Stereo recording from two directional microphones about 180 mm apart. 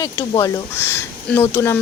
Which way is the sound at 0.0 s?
20° left (ahead or behind).